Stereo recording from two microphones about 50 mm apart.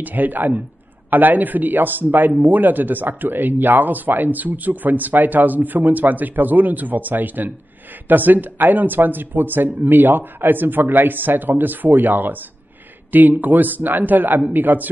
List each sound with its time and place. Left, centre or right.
0.0 s a man's voice: right